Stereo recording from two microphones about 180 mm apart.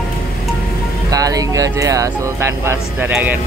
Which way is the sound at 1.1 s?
20° right (ahead or behind).